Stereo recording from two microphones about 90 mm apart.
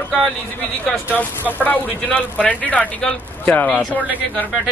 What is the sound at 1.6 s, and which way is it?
Speech, 20° left (ahead or behind).